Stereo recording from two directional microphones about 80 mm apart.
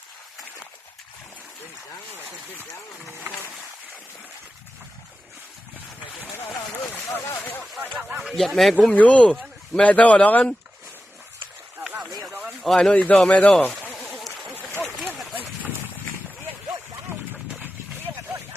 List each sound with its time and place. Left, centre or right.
6.9 s speech: left
7.9 s speech: centre
8.9 s speech: centre
12.6 s speech: centre
14.1 s a sound: centre